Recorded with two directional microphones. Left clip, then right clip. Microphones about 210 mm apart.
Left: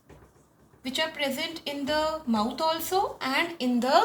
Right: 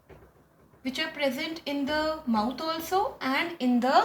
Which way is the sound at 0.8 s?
15° left (ahead or behind).